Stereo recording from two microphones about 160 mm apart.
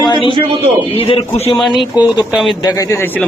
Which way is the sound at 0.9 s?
35° left (ahead or behind).